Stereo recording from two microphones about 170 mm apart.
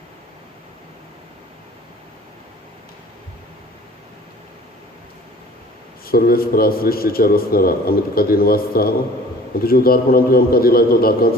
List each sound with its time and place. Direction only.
6.1 s a man's voice: 60° left (ahead or behind)